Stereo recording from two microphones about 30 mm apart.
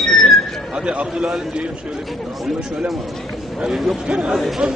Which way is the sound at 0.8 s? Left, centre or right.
Right.